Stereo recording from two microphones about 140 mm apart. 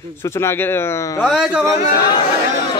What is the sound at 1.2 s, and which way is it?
Speech, centre (ahead or behind).